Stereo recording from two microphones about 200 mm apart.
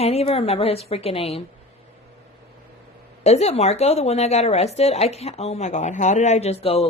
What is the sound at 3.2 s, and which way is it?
A man's voice, 30° left (ahead or behind).